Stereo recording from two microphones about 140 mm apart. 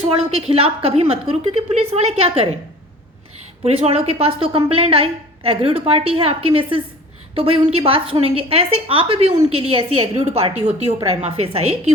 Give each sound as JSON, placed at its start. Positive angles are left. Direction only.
{"t": 0.0, "sound": "a woman's voice", "side_deg": -45}
{"t": 3.6, "sound": "a woman's voice", "side_deg": -45}